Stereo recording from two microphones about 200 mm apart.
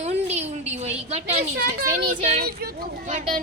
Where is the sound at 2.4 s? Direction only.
50° right (ahead or behind).